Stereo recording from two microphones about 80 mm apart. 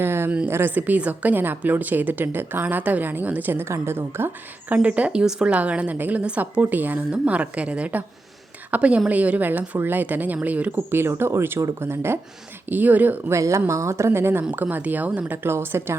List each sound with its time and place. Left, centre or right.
0.0 s a sound: right
0.4 s a woman's voice: right
4.7 s a woman's voice: centre
11.0 s a woman's voice: right
13.3 s a woman's voice: right; by 15.4 s centre
15.4 s a woman's voice: right